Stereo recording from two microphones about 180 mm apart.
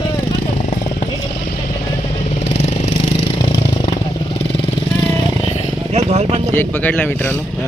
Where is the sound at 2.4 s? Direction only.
35° left (ahead or behind).